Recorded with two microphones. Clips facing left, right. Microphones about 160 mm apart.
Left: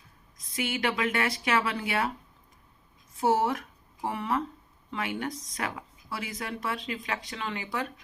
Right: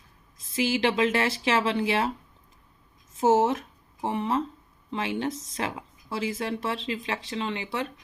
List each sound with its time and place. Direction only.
0.3 s speech: 25° right (ahead or behind)
3.2 s speech: 20° right (ahead or behind)